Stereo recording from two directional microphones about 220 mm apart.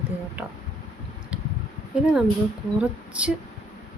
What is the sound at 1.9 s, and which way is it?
A woman's voice, 5° right (ahead or behind).